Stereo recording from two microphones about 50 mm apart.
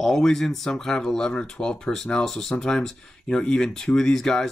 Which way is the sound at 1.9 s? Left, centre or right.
Centre.